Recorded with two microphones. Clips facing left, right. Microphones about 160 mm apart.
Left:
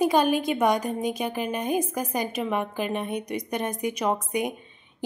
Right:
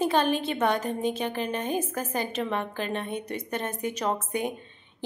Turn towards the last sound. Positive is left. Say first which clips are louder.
# left 2 dB
turn(degrees=15)  # may be behind; listen again after turning